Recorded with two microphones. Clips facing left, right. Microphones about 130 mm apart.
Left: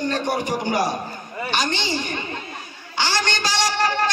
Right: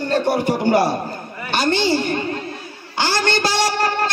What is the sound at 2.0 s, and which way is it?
Music, 50° right (ahead or behind).